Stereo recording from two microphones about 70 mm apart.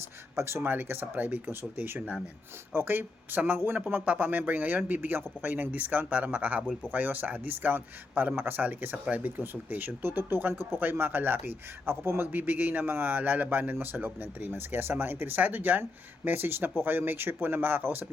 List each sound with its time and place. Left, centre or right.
0.3 s a man's voice: right